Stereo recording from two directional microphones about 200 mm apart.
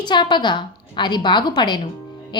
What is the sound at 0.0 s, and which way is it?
A woman's voice, 20° left (ahead or behind).